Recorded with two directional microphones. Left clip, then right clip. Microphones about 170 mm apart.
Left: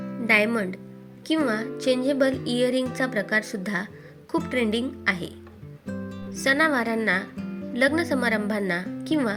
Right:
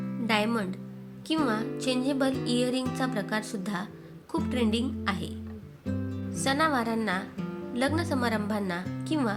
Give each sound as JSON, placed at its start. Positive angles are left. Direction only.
{"t": 0.3, "sound": "speech", "side_deg": 20}
{"t": 5.8, "sound": "music", "side_deg": 0}
{"t": 6.4, "sound": "speech", "side_deg": 20}